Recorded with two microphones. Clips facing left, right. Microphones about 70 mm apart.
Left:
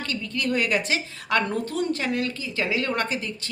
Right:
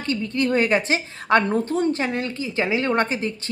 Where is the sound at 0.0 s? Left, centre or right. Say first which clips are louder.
Right 5 dB; right.